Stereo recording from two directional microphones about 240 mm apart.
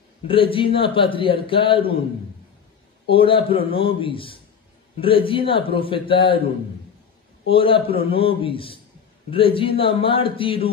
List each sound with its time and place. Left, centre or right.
0.3 s a man's voice: left
3.1 s a man's voice: left
7.4 s a man's voice: left